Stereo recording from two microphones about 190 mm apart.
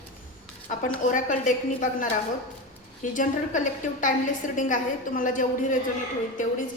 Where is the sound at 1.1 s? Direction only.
45° left (ahead or behind).